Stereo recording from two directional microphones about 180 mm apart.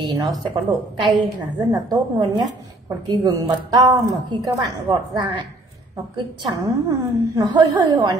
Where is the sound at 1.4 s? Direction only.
25° right (ahead or behind).